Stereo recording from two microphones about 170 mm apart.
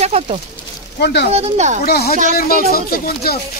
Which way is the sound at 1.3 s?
40° right (ahead or behind).